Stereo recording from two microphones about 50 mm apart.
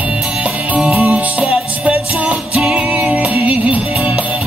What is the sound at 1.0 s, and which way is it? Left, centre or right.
Music, right.